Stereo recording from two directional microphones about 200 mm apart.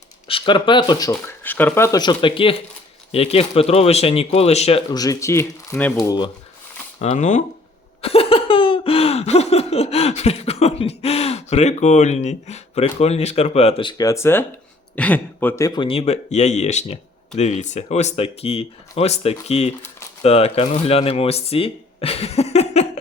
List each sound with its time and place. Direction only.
0.3 s speech: 25° left (ahead or behind)
4.9 s speech: 20° left (ahead or behind)
7.0 s speech: 35° left (ahead or behind)
8.0 s laughter: 30° left (ahead or behind); by 14.4 s 15° left (ahead or behind)
14.9 s speech: 5° left (ahead or behind); by 22.9 s 35° left (ahead or behind)